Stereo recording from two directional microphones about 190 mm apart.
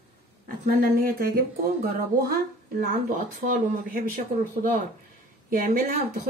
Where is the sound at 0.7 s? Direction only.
50° right (ahead or behind).